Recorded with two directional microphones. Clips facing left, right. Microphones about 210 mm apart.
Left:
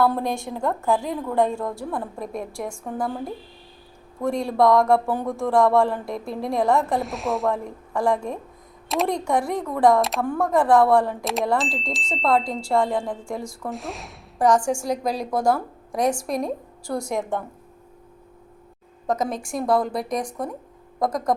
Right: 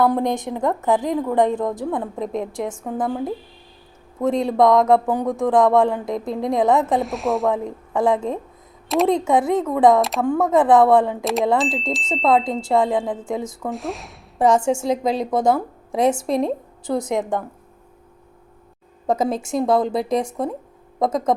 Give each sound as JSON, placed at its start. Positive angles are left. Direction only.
{"t": 0.0, "sound": "a woman's voice", "side_deg": -15}
{"t": 4.2, "sound": "a woman's voice", "side_deg": -20}
{"t": 7.0, "sound": "speech", "side_deg": 0}
{"t": 7.5, "sound": "a woman's voice", "side_deg": -20}
{"t": 11.2, "sound": "speech", "side_deg": 0}
{"t": 12.6, "sound": "a woman's voice", "side_deg": -20}
{"t": 13.7, "sound": "speech", "side_deg": 0}
{"t": 14.3, "sound": "a woman's voice", "side_deg": -25}
{"t": 19.0, "sound": "a woman's voice", "side_deg": -30}